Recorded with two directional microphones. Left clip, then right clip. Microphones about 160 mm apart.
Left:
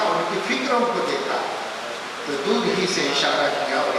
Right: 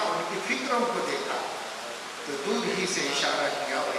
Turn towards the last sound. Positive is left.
turn(degrees=10)  # may be behind; listen again after turning